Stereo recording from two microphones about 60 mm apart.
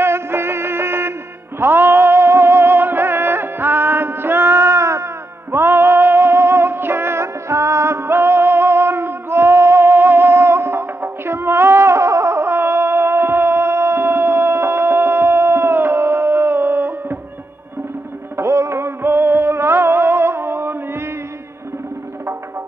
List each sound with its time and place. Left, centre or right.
0.0 s music: right
5.5 s music: right
18.3 s music: right